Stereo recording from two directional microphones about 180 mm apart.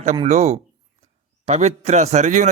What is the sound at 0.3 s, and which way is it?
A man's voice, 40° right (ahead or behind).